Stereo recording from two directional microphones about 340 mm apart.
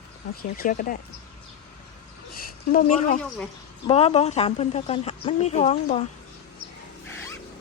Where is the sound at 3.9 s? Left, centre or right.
Centre.